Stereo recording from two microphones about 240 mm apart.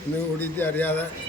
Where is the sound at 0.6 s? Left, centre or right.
Centre.